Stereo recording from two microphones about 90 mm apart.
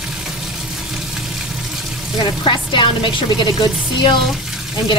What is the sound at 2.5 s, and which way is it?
A woman's voice, 60° left (ahead or behind).